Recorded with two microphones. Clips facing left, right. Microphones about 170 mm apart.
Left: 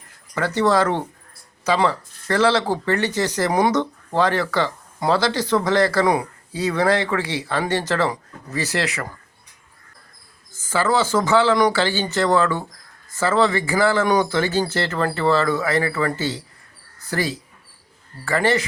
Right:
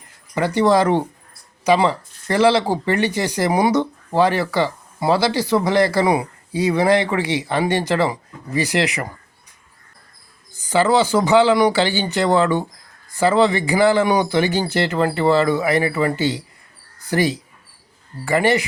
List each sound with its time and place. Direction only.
0.3 s speech: 15° right (ahead or behind)
10.6 s speech: 15° right (ahead or behind)